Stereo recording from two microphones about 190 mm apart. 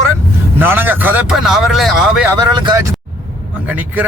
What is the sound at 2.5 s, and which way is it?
Speech, 25° right (ahead or behind).